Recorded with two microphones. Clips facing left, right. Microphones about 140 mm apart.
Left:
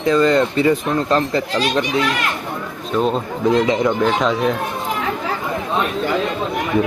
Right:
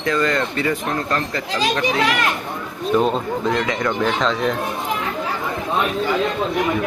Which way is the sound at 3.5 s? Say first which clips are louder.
Left 7 dB; 20° left (ahead or behind).